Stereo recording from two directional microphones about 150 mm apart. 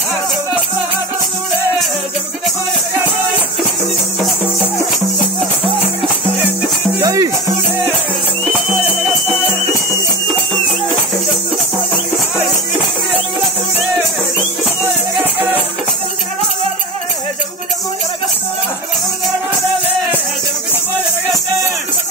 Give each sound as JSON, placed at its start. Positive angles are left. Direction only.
{"t": 7.0, "sound": "music", "side_deg": -25}